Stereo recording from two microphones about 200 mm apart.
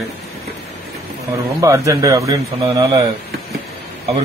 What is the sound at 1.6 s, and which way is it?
A man's voice, 15° right (ahead or behind).